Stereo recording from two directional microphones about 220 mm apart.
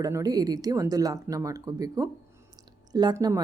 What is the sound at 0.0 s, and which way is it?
Speech, 15° right (ahead or behind).